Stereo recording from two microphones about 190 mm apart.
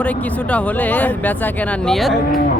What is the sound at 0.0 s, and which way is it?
Speech, 10° left (ahead or behind).